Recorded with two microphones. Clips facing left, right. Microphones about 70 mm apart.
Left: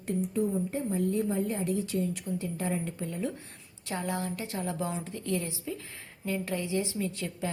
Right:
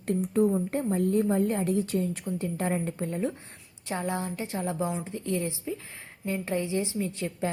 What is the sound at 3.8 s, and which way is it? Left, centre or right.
A woman's voice, right.